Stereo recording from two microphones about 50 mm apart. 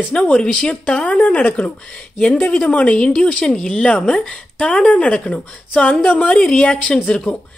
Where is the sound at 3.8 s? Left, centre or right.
Left.